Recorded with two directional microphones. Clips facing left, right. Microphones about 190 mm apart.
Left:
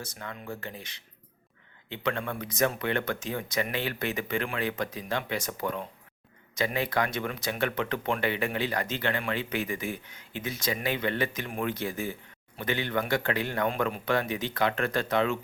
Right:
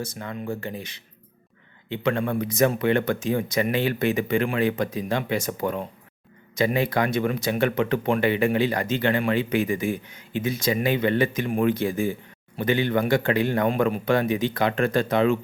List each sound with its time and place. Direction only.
0.2 s speech: 25° right (ahead or behind)
0.6 s speech: 10° right (ahead or behind)
5.5 s speech: 30° right (ahead or behind)
6.5 s speech: 15° right (ahead or behind)